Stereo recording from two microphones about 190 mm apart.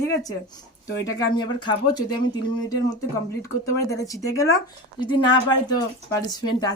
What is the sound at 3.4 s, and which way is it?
A woman's voice, 15° left (ahead or behind).